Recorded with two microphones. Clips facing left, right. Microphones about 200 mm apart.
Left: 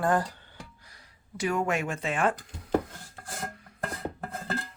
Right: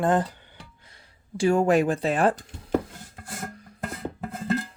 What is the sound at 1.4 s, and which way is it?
Speech, 30° right (ahead or behind).